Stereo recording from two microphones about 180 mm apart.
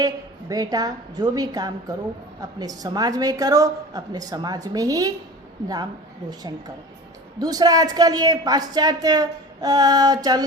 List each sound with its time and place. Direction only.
0.0 s a woman's voice: 20° right (ahead or behind)
7.3 s a woman's voice: 20° right (ahead or behind)